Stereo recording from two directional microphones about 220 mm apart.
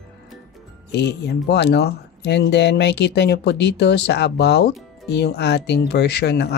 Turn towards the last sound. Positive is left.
turn(degrees=50)  # may be behind; listen again after turning